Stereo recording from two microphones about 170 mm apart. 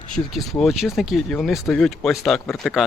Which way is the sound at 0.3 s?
Centre (ahead or behind).